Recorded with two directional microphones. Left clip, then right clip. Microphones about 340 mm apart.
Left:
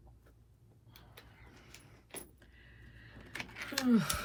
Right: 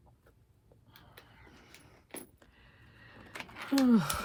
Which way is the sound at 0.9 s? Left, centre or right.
Right.